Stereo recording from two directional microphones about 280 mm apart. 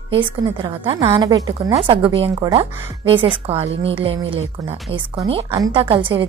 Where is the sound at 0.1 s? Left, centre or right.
Centre.